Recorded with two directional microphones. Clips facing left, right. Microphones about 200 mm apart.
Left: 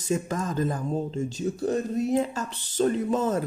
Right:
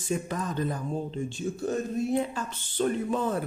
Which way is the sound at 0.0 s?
40° left (ahead or behind).